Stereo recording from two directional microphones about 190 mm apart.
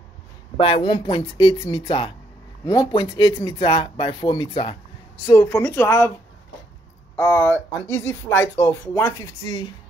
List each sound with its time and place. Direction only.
0.6 s speech: 30° left (ahead or behind)
5.2 s speech: 15° left (ahead or behind)
7.2 s speech: 10° left (ahead or behind)